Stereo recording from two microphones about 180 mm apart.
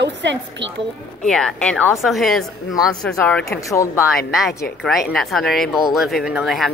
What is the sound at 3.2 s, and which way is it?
Speech, 10° left (ahead or behind).